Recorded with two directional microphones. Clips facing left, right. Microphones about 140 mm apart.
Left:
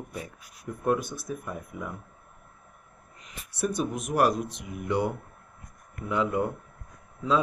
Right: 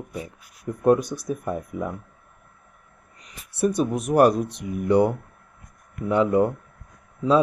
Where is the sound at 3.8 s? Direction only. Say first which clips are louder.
Right 7 dB; 40° right (ahead or behind).